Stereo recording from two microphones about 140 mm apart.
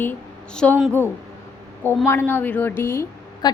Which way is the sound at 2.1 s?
15° left (ahead or behind).